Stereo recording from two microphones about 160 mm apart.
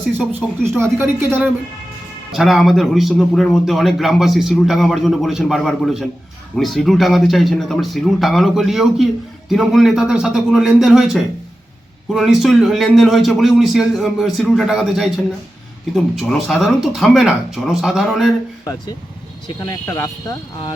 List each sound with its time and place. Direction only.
0.2 s a woman's voice: 10° right (ahead or behind)
2.3 s a man's voice: centre (ahead or behind)
18.6 s speech: 20° left (ahead or behind)